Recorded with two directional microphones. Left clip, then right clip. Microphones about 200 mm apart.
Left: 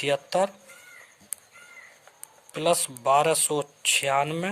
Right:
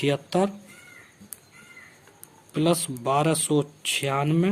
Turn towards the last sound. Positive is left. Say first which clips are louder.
# left 1 dB
turn(degrees=25)  # may be behind; listen again after turning